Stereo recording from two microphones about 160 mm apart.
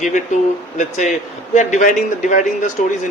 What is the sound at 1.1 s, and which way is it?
A man's voice, 50° left (ahead or behind).